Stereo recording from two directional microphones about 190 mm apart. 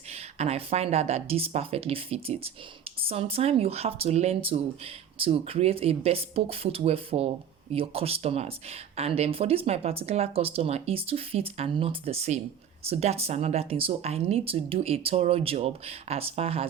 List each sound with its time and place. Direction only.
0.1 s speech: 35° right (ahead or behind)